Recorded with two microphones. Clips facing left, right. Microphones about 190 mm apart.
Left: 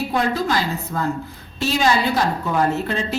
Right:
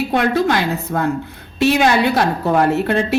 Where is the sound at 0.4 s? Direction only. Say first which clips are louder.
Right 4 dB; 60° right (ahead or behind).